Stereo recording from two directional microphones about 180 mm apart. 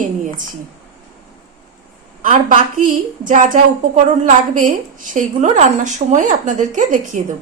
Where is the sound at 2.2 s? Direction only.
50° right (ahead or behind).